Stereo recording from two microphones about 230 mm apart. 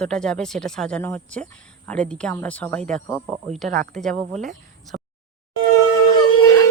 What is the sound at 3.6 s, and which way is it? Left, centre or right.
Speech, right.